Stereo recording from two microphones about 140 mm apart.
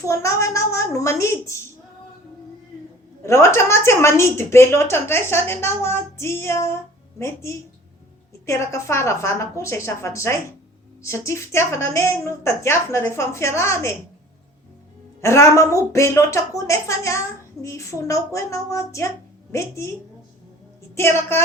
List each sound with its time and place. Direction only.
0.0 s a woman's voice: 20° left (ahead or behind)
3.2 s a woman's voice: 20° left (ahead or behind)
15.2 s a woman's voice: 20° left (ahead or behind)
20.9 s a woman's voice: 20° left (ahead or behind)